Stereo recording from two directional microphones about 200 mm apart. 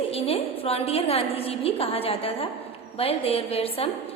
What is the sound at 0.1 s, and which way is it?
A woman's voice, 30° left (ahead or behind).